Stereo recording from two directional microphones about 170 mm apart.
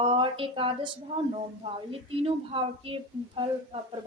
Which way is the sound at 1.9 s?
35° right (ahead or behind).